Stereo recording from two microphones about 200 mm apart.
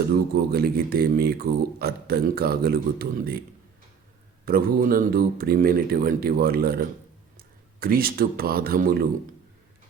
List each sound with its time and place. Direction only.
0.3 s speech: 50° right (ahead or behind)
4.4 s speech: 45° right (ahead or behind)